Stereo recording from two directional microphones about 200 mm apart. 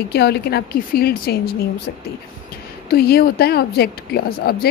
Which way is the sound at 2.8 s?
50° left (ahead or behind).